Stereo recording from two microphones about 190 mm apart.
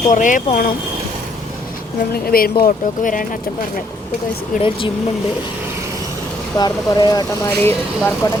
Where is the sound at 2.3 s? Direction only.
50° left (ahead or behind).